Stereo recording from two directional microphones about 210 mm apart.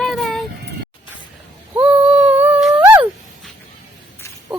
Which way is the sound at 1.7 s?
5° right (ahead or behind).